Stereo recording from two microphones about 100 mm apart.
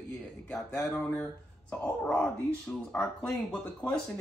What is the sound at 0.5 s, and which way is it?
Speech, 10° left (ahead or behind).